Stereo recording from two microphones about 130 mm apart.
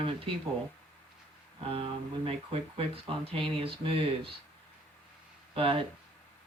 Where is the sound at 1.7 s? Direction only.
50° right (ahead or behind).